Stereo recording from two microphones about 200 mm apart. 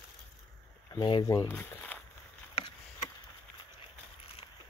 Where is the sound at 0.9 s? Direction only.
20° left (ahead or behind).